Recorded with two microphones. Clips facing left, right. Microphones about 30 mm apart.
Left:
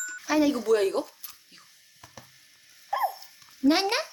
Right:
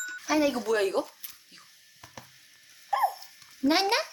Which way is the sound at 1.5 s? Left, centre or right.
Centre.